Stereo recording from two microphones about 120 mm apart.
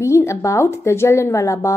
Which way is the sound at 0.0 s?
25° left (ahead or behind).